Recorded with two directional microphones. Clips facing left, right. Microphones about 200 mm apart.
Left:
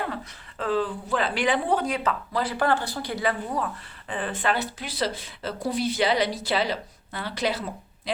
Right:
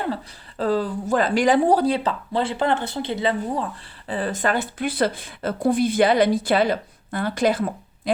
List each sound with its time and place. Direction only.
0.6 s speech: 40° right (ahead or behind)
4.1 s speech: 40° right (ahead or behind)